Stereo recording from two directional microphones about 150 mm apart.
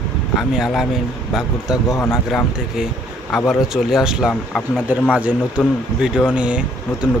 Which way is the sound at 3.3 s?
Centre (ahead or behind).